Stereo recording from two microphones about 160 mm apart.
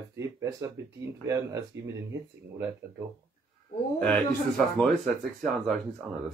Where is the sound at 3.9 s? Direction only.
5° left (ahead or behind).